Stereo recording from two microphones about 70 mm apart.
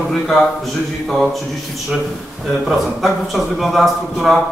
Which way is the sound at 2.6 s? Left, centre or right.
Centre.